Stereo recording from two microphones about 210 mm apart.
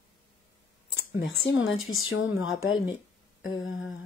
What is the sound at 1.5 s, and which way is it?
Speech, 65° left (ahead or behind).